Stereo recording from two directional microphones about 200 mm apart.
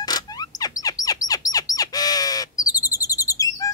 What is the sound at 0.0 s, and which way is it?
Bird, 20° left (ahead or behind).